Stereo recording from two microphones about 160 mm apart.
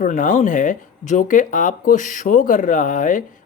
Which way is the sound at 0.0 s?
55° left (ahead or behind).